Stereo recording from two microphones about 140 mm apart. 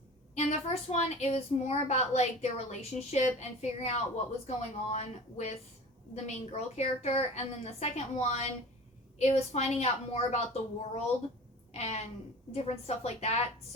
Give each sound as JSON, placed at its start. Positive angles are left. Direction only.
{"t": 0.3, "sound": "a woman's voice", "side_deg": 50}